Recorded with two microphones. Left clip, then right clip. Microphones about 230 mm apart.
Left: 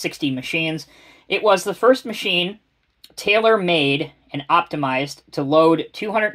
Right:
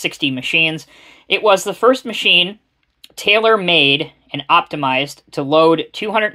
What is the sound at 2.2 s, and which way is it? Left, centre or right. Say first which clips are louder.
Speech: right 8 dB; right.